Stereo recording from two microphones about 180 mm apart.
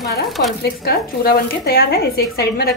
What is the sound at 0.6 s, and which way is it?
Speech, 60° left (ahead or behind).